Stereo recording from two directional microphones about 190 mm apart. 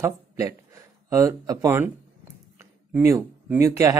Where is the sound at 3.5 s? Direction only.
15° right (ahead or behind).